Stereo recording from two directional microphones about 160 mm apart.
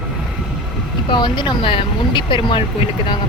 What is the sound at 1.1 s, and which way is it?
Speech, 30° left (ahead or behind).